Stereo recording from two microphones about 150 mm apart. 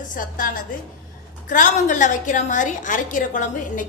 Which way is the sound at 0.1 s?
65° left (ahead or behind).